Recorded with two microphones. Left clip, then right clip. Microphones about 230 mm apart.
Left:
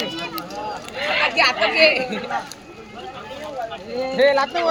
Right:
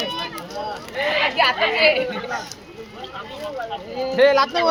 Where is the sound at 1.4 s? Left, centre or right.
Left.